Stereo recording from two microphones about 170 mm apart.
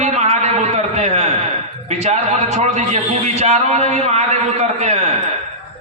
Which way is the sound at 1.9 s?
40° right (ahead or behind).